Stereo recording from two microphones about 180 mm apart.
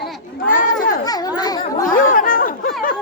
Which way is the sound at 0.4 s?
50° left (ahead or behind).